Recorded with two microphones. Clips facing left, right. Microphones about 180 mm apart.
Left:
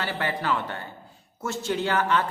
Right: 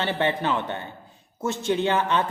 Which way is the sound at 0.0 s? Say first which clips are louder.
Right 4 dB; 25° right (ahead or behind).